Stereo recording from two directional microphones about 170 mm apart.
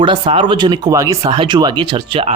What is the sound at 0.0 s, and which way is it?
Speech, 30° right (ahead or behind).